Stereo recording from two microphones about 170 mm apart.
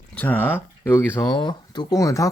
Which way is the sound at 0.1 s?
10° left (ahead or behind).